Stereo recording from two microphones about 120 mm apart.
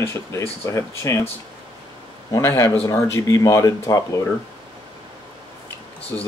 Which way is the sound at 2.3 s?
25° left (ahead or behind).